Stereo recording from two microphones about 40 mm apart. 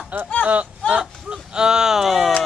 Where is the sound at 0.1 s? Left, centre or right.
Right.